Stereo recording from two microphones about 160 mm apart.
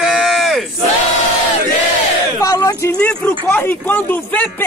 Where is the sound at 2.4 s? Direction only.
20° left (ahead or behind).